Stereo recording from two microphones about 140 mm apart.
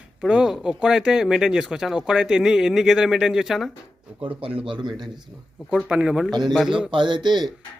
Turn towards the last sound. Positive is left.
turn(degrees=-30)  # may be behind; listen again after turning